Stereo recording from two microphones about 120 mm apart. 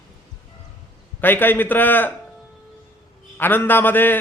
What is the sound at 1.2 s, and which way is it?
Speech, 15° left (ahead or behind).